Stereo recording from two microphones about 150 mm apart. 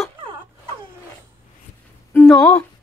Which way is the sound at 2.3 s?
20° left (ahead or behind).